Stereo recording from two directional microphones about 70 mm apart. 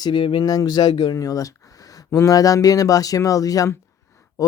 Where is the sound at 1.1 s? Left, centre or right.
Left.